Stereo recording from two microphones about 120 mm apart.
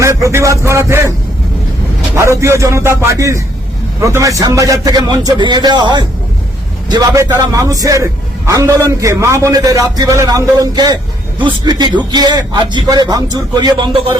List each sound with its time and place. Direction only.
0.0 s music: 25° right (ahead or behind)
2.1 s a man's voice: 25° right (ahead or behind); by 14.2 s 40° right (ahead or behind)